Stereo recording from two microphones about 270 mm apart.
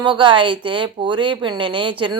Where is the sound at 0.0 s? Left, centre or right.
Centre.